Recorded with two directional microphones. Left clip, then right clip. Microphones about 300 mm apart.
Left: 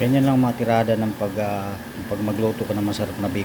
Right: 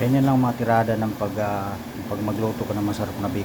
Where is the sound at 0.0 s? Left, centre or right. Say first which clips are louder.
Left 1 dB; left.